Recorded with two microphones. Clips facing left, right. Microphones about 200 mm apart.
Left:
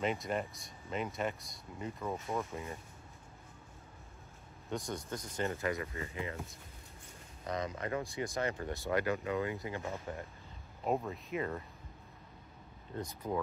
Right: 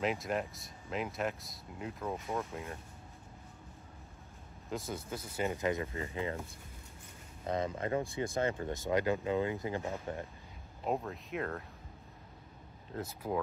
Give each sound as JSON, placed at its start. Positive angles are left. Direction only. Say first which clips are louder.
{"t": 0.0, "sound": "speech", "louder": "right 1 dB", "side_deg": 0}
{"t": 4.6, "sound": "speech", "louder": "even", "side_deg": -5}
{"t": 5.8, "sound": "speech", "louder": "right 3 dB", "side_deg": -30}
{"t": 10.9, "sound": "speech", "louder": "left 1 dB", "side_deg": 0}
{"t": 12.9, "sound": "speech", "louder": "right 1 dB", "side_deg": -5}